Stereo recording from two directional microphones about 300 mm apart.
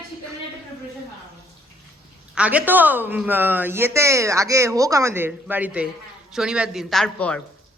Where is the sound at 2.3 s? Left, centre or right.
Centre.